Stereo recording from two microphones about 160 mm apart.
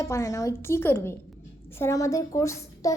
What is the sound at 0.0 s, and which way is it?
A woman's voice, 20° left (ahead or behind).